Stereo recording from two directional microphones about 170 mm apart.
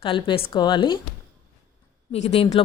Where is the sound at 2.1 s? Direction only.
35° left (ahead or behind).